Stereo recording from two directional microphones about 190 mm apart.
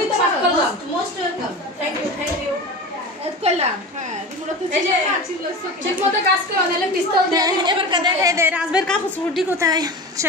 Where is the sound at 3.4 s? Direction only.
35° right (ahead or behind).